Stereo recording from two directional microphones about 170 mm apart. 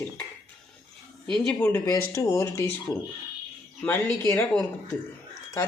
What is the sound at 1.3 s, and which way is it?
Speech, 5° left (ahead or behind).